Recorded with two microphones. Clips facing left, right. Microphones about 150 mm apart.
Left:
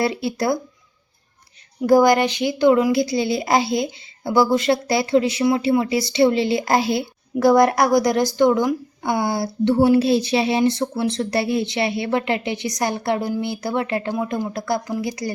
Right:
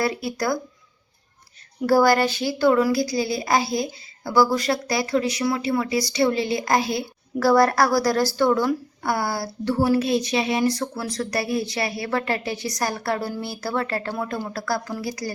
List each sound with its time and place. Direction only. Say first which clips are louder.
0.0 s a woman's voice: left 3 dB; 25° left (ahead or behind)
1.9 s a woman's voice: left 3 dB; 15° left (ahead or behind)